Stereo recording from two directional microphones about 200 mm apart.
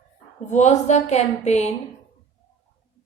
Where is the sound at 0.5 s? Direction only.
35° left (ahead or behind).